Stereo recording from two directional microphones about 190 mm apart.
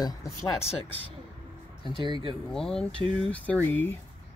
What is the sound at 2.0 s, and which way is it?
Speech, 25° right (ahead or behind).